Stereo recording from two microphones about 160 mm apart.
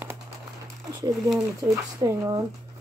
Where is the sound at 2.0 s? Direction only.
20° right (ahead or behind).